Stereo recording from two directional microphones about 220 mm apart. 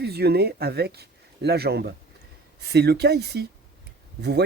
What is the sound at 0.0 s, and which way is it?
Speech, 45° right (ahead or behind).